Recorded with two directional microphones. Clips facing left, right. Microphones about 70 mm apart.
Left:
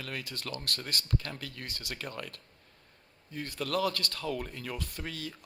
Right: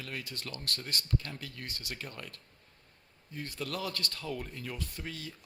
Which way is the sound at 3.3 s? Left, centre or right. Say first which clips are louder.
Left 5 dB; left.